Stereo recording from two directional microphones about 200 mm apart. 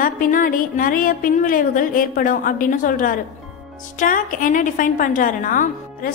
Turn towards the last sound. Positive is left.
turn(degrees=40)  # may be behind; listen again after turning